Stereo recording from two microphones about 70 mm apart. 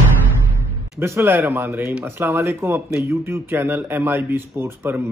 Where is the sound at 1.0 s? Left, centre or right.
Right.